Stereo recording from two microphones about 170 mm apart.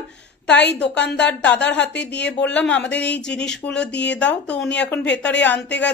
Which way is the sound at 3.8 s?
90° left.